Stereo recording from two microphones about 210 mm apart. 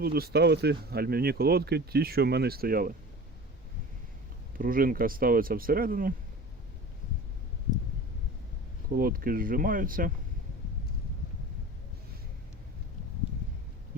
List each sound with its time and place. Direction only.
0.0 s speech: 45° right (ahead or behind)
4.5 s speech: 40° right (ahead or behind)
8.9 s speech: 45° right (ahead or behind)